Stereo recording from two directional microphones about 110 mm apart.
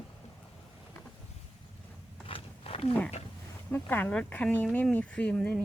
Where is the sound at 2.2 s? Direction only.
60° left (ahead or behind).